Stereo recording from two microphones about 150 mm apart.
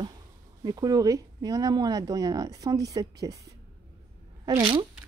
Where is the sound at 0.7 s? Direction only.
25° right (ahead or behind).